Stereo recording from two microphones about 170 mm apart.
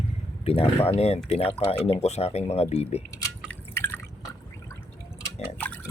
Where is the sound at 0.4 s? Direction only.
35° left (ahead or behind).